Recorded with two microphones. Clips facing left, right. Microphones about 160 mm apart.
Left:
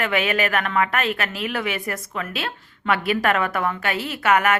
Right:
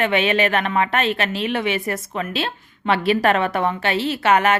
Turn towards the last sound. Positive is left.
turn(degrees=-25)  # may be behind; listen again after turning